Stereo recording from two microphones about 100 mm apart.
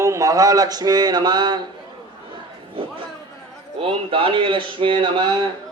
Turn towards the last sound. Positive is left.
turn(degrees=-50)  # may be behind; listen again after turning